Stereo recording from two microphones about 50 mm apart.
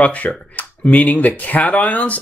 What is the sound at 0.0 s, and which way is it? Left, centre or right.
Speech, left.